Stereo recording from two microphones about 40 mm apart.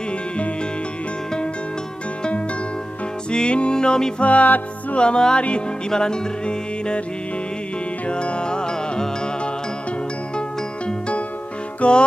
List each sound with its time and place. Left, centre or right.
3.3 s music: left
4.2 s music: left
8.1 s music: left
10.9 s music: left